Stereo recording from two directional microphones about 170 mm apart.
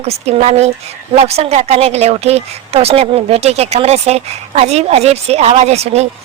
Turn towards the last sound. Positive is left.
turn(degrees=-40)  # may be behind; listen again after turning